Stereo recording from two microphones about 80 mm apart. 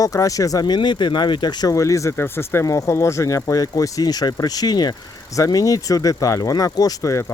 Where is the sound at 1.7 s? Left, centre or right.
Left.